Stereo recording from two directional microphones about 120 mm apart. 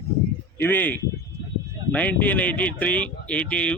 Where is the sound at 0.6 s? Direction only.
15° left (ahead or behind).